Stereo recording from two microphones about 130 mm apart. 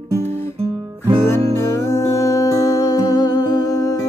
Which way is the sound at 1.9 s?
25° left (ahead or behind).